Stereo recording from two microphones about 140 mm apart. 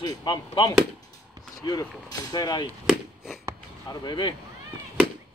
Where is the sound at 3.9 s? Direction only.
35° left (ahead or behind).